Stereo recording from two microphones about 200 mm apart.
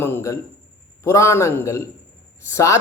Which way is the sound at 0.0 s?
15° left (ahead or behind).